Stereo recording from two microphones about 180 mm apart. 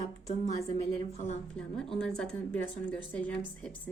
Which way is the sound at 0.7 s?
35° left (ahead or behind).